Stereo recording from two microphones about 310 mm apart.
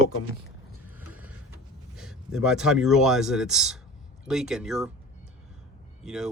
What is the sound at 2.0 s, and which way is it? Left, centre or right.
Speech, centre.